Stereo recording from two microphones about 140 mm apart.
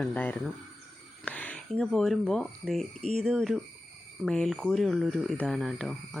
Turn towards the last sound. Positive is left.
turn(degrees=0)  # may be behind; listen again after turning